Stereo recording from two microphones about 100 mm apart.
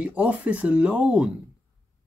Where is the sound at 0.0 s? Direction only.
15° right (ahead or behind).